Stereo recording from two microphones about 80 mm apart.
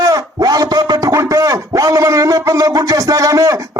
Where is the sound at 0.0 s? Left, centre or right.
Right.